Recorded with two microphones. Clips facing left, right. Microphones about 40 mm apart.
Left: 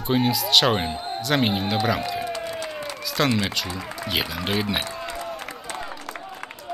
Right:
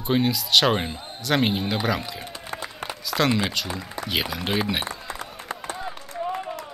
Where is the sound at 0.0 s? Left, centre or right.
Centre.